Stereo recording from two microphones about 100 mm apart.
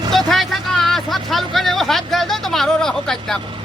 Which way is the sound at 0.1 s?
Centre (ahead or behind).